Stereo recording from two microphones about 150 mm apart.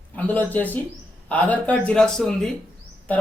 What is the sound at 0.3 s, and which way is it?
Speech, 10° left (ahead or behind).